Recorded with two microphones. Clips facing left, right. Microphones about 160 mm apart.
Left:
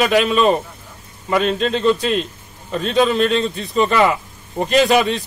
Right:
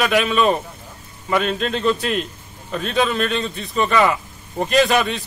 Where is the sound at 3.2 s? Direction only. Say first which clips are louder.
Left 5 dB; centre (ahead or behind).